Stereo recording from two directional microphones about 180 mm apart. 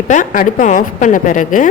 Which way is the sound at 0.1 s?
45° left (ahead or behind).